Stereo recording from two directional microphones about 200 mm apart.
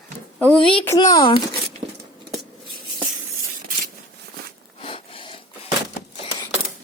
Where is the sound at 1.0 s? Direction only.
20° left (ahead or behind).